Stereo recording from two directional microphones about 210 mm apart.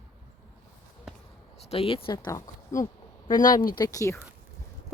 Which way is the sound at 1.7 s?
25° left (ahead or behind).